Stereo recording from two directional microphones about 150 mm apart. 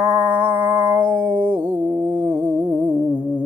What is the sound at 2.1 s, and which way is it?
Music, 30° right (ahead or behind).